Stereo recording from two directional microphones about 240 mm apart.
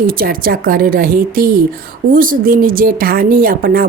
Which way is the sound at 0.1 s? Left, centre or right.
Right.